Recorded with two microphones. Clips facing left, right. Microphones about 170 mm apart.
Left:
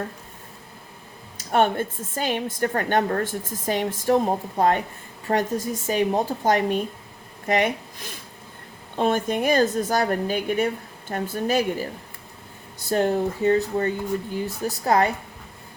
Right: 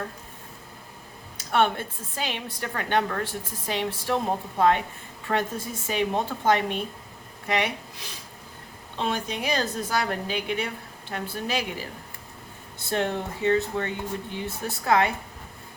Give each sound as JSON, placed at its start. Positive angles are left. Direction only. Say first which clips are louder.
{"t": 1.5, "sound": "a woman's voice", "louder": "left 3 dB", "side_deg": 45}
{"t": 12.9, "sound": "speech", "louder": "left 6 dB", "side_deg": 40}